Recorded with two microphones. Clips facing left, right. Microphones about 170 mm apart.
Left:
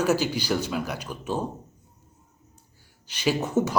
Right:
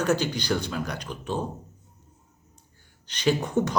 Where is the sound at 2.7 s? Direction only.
10° left (ahead or behind).